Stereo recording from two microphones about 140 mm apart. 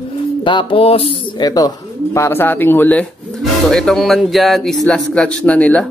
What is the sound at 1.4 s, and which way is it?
Speech, 25° left (ahead or behind).